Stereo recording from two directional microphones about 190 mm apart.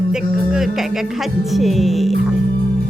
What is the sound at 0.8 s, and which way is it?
Speech, centre (ahead or behind).